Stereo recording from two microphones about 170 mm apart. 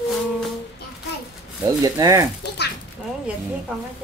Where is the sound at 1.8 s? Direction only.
20° right (ahead or behind).